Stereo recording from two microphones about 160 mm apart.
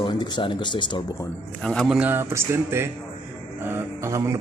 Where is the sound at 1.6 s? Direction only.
5° left (ahead or behind).